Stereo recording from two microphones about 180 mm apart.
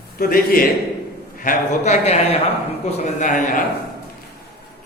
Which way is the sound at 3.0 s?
40° left (ahead or behind).